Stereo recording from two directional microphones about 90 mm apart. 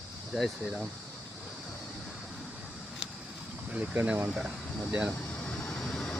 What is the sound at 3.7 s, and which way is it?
Vehicle, 10° right (ahead or behind).